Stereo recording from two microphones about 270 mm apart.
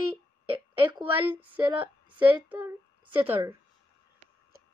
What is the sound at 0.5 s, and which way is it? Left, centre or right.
Speech, centre.